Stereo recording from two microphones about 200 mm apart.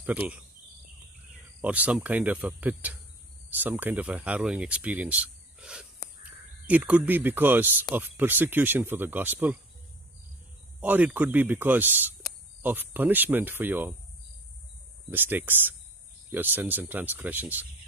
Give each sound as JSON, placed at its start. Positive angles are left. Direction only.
{"t": 1.6, "sound": "speech", "side_deg": -5}
{"t": 10.8, "sound": "speech", "side_deg": -10}
{"t": 15.0, "sound": "speech", "side_deg": -10}